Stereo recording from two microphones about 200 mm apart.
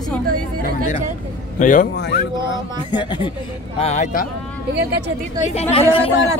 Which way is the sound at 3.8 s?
35° left (ahead or behind).